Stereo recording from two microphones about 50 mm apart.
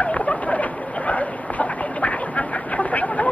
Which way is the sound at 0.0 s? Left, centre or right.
Left.